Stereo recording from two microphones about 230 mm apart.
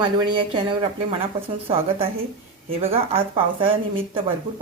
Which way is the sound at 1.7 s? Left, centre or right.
Right.